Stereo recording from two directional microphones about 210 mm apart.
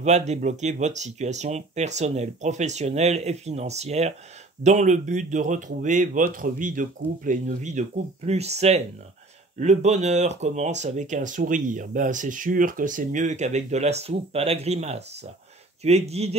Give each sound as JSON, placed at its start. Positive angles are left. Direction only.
{"t": 0.0, "sound": "speech", "side_deg": -35}